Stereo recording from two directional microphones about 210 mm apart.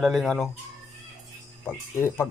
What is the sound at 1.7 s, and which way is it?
Speech, 10° left (ahead or behind).